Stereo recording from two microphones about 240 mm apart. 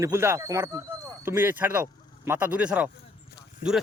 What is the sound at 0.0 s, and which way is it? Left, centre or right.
Speech, centre.